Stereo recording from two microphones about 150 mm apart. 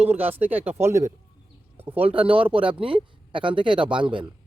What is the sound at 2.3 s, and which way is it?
Speech, 35° right (ahead or behind).